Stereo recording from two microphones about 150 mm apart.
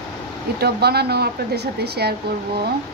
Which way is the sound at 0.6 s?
90° right.